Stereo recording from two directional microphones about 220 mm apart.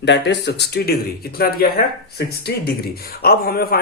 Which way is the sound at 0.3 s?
50° left (ahead or behind).